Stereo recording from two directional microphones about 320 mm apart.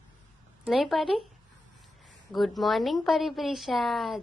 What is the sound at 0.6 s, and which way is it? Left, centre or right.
Speech, centre.